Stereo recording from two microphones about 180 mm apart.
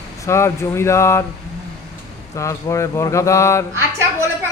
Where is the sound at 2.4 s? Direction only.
15° left (ahead or behind).